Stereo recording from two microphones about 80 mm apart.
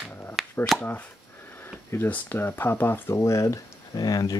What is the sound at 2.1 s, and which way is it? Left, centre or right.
Speech, left.